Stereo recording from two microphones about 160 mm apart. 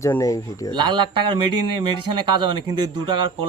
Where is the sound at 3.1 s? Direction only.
30° right (ahead or behind).